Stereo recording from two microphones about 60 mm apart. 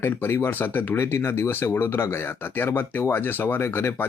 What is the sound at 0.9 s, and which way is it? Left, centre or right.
Speech, left.